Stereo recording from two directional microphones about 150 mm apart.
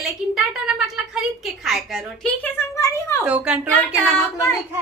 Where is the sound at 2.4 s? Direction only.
20° left (ahead or behind).